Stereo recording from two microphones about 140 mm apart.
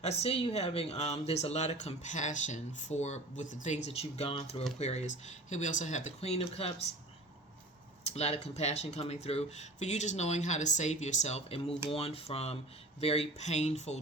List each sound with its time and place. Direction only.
0.0 s speech: 45° left (ahead or behind)
8.0 s speech: 50° left (ahead or behind)